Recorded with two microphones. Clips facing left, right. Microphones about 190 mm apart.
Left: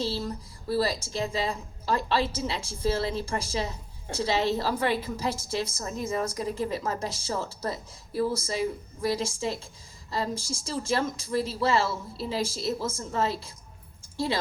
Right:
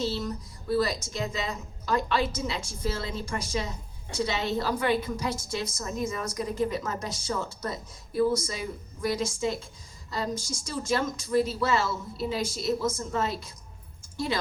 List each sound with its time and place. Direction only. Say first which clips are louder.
0.0 s a woman's voice: even; 30° left (ahead or behind)